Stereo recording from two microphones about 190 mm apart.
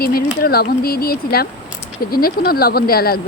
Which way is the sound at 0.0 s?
50° left (ahead or behind).